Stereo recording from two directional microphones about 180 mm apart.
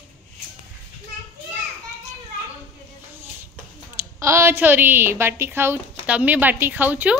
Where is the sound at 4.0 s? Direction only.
15° right (ahead or behind).